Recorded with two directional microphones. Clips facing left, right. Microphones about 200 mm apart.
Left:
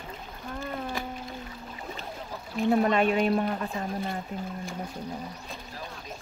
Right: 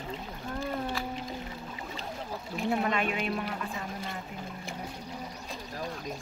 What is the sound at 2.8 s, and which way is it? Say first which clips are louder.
Speech: left 7 dB; 40° left (ahead or behind).